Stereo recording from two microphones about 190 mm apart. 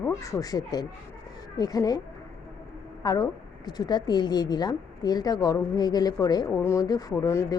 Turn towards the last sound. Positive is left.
turn(degrees=15)  # may be behind; listen again after turning